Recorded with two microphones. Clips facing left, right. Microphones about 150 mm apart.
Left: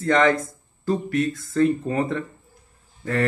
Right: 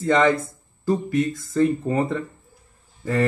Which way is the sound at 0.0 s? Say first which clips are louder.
Right 1 dB; 5° right (ahead or behind).